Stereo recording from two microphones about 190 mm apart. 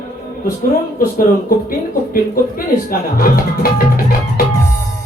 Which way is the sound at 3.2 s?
50° left (ahead or behind).